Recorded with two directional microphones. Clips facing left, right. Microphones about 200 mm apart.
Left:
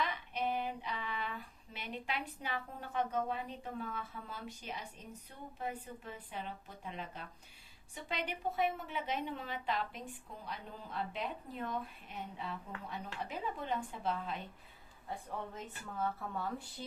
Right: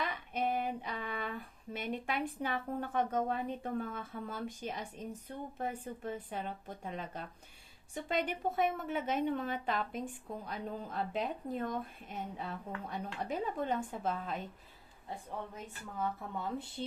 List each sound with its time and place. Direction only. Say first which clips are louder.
0.0 s female singing: right 2 dB; 50° right (ahead or behind)
5.5 s a woman's voice: right 1 dB; 50° right (ahead or behind)
15.5 s speech: even; 15° right (ahead or behind)